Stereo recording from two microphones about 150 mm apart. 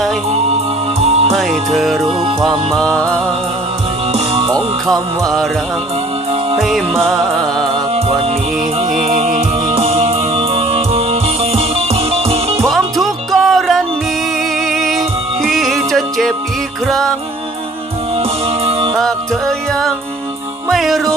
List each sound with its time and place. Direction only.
0.9 s music: 45° right (ahead or behind)
1.4 s music: centre (ahead or behind)
4.1 s music: 40° right (ahead or behind)
6.6 s music: centre (ahead or behind)
7.9 s music: 40° right (ahead or behind)
9.7 s music: 40° right (ahead or behind)
12.6 s music: centre (ahead or behind)
18.2 s music: 40° right (ahead or behind)
18.9 s music: centre (ahead or behind)